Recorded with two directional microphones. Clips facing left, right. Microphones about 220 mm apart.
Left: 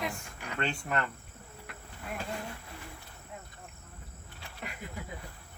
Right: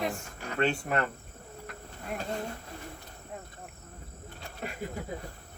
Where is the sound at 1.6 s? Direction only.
40° right (ahead or behind).